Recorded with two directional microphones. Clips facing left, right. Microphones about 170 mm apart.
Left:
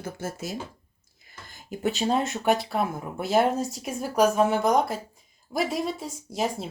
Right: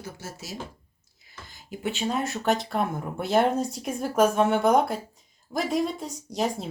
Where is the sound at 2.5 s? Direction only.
5° left (ahead or behind).